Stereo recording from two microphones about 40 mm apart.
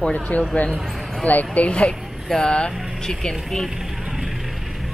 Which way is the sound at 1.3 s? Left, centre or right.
Left.